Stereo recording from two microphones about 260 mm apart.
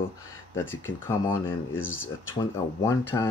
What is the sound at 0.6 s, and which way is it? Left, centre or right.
Speech, left.